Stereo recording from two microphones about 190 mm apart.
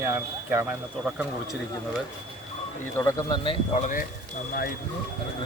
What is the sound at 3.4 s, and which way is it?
Speech, 40° left (ahead or behind).